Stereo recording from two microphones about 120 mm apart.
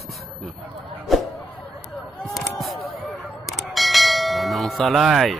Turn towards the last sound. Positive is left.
turn(degrees=0)  # may be behind; listen again after turning